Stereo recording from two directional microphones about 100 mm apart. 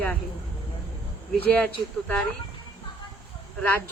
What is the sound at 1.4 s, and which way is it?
Speech, 15° left (ahead or behind).